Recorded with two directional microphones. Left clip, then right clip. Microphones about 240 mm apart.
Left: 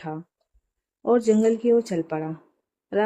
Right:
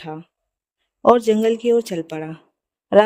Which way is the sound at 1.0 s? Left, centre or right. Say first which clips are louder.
Right 5 dB; right.